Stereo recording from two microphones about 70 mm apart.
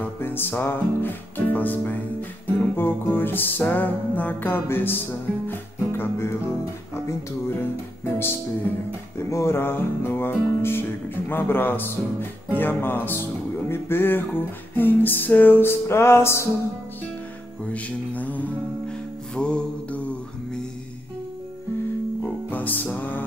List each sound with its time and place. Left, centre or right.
0.0 s music: left
9.3 s music: left
17.7 s music: left
22.2 s music: left